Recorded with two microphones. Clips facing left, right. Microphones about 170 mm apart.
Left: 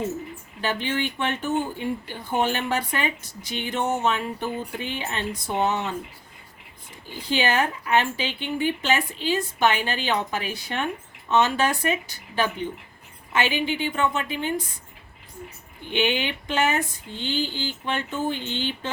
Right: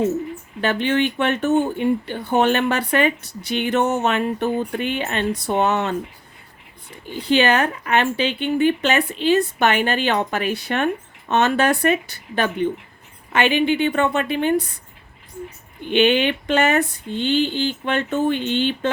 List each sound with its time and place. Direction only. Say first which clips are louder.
0.6 s speech: right 7 dB; 65° right (ahead or behind)
7.3 s a woman's voice: right 6 dB; 65° right (ahead or behind)
15.9 s a woman's voice: right 8 dB; 65° right (ahead or behind)